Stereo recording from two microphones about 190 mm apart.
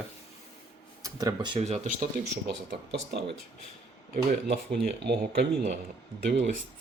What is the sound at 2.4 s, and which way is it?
Speech, 60° right (ahead or behind).